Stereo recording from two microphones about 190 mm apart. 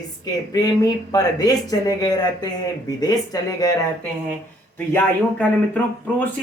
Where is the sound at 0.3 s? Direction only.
20° left (ahead or behind).